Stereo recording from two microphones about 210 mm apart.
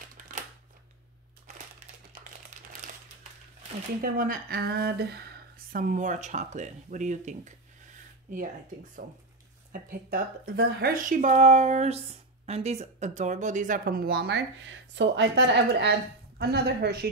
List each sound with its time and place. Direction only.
4.0 s a woman's voice: 45° right (ahead or behind)
9.7 s a woman's voice: 45° right (ahead or behind)